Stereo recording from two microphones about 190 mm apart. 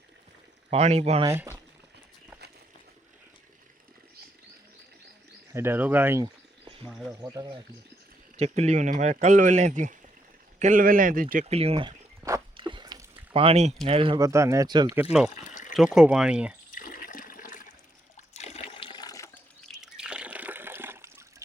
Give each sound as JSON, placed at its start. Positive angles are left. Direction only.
{"t": 0.7, "sound": "speech", "side_deg": -35}
{"t": 1.2, "sound": "speech", "side_deg": -15}
{"t": 5.5, "sound": "speech", "side_deg": -10}
{"t": 8.4, "sound": "speech", "side_deg": -35}
{"t": 11.4, "sound": "speech", "side_deg": -30}
{"t": 12.5, "sound": "a sound", "side_deg": -25}
{"t": 13.8, "sound": "speech", "side_deg": -30}
{"t": 14.3, "sound": "speech", "side_deg": -15}
{"t": 15.3, "sound": "water", "side_deg": 40}
{"t": 15.7, "sound": "speech", "side_deg": 0}
{"t": 16.7, "sound": "toilet flush", "side_deg": 45}
{"t": 18.3, "sound": "water", "side_deg": 35}
{"t": 19.6, "sound": "water", "side_deg": -5}